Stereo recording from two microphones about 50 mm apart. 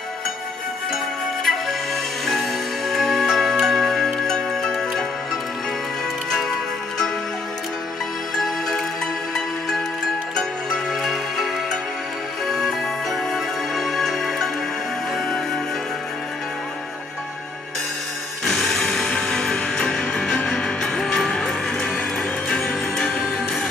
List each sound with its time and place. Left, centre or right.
1.4 s music: centre
2.9 s music: centre
8.4 s music: centre
18.5 s music: centre